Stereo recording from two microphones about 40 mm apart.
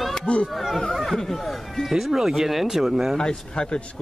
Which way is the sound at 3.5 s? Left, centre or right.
Left.